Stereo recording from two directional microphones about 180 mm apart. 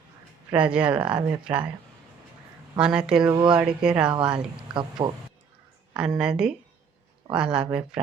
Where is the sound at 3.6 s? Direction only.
5° right (ahead or behind).